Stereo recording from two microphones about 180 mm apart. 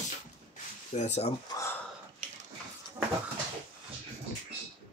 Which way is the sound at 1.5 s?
15° left (ahead or behind).